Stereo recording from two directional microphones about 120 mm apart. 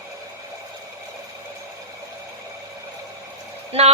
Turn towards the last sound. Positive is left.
turn(degrees=-55)  # may be behind; listen again after turning